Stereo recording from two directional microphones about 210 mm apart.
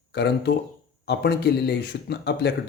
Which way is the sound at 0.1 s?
50° left (ahead or behind).